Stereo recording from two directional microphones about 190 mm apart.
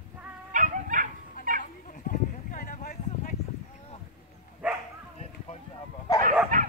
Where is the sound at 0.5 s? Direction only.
45° right (ahead or behind).